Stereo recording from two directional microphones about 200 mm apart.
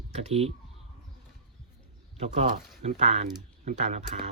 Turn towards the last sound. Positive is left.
turn(degrees=-35)  # may be behind; listen again after turning